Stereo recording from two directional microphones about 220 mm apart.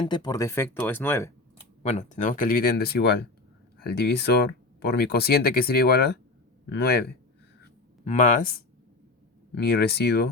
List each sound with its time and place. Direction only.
0.0 s speech: 20° left (ahead or behind)
1.8 s speech: 30° left (ahead or behind); by 7.1 s 45° left (ahead or behind)
8.0 s speech: 30° left (ahead or behind)
9.6 s speech: 45° left (ahead or behind)